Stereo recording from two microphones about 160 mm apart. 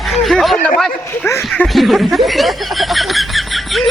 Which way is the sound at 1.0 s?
15° left (ahead or behind).